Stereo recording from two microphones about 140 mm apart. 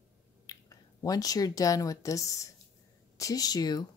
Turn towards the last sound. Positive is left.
turn(degrees=30)  # may be behind; listen again after turning